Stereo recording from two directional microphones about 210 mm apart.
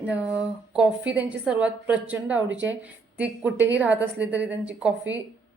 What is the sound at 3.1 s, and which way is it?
A woman's voice, 5° right (ahead or behind).